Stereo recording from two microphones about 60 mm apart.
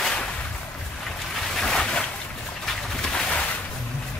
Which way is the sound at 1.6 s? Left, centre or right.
Centre.